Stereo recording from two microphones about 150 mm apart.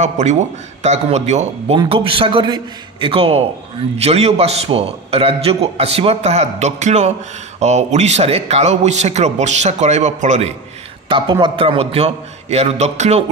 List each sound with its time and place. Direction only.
0.0 s a man's voice: 50° right (ahead or behind)
1.8 s a man's voice: 35° right (ahead or behind)
11.1 s a man's voice: 30° right (ahead or behind); by 13.2 s 50° right (ahead or behind)